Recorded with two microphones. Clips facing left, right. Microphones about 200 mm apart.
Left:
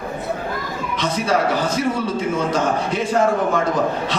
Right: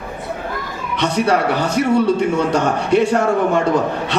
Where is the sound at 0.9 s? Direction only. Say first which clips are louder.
Right 4 dB; 65° right (ahead or behind).